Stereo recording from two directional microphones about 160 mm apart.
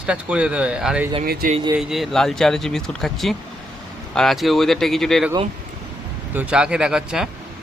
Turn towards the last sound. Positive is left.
turn(degrees=-5)  # may be behind; listen again after turning